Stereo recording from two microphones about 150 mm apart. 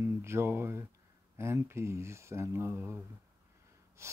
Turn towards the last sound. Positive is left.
turn(degrees=-20)  # may be behind; listen again after turning